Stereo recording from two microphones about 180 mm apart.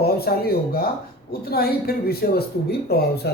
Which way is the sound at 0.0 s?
60° left (ahead or behind).